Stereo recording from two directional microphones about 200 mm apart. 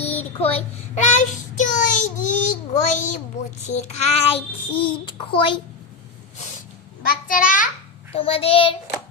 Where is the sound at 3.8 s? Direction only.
30° left (ahead or behind).